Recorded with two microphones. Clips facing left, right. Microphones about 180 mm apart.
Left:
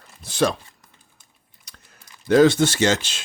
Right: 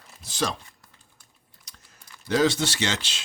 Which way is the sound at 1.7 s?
65° left (ahead or behind).